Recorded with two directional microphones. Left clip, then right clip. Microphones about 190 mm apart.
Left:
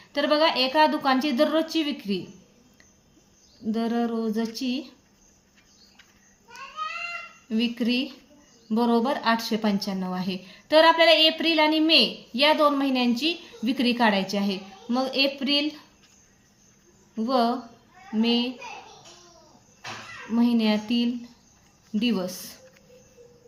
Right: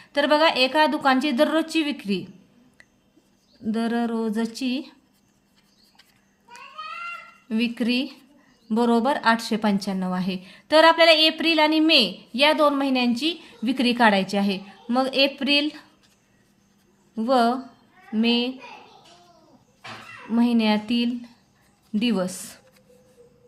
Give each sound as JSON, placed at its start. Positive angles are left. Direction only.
{"t": 0.0, "sound": "a woman's voice", "side_deg": -35}
{"t": 3.7, "sound": "a woman's voice", "side_deg": -35}
{"t": 7.4, "sound": "a woman's voice", "side_deg": -35}
{"t": 17.2, "sound": "a woman's voice", "side_deg": -35}
{"t": 20.3, "sound": "a woman's voice", "side_deg": -35}